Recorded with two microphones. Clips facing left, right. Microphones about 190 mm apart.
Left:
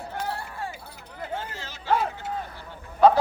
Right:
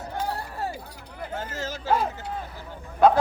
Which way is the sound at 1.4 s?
45° right (ahead or behind).